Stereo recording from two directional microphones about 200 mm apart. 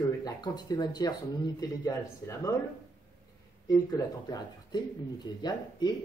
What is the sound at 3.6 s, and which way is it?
Speech, 20° left (ahead or behind).